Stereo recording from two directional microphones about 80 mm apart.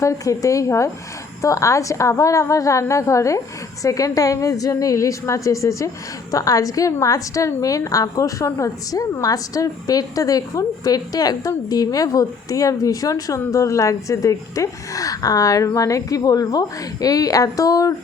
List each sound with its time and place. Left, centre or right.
0.0 s a woman's voice: left